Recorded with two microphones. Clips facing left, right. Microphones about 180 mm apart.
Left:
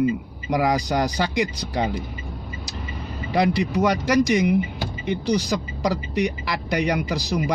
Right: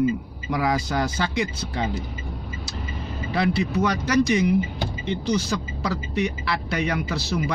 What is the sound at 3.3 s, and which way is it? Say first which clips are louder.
Speech: left 2 dB; 15° left (ahead or behind).